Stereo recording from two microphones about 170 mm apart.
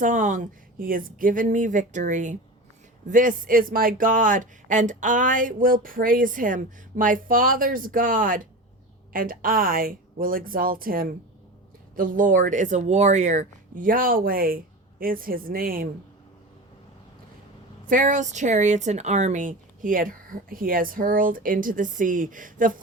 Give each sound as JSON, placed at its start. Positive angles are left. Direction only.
{"t": 0.0, "sound": "speech", "side_deg": -50}
{"t": 17.8, "sound": "speech", "side_deg": -50}